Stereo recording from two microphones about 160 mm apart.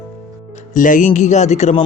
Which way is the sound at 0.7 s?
55° left (ahead or behind).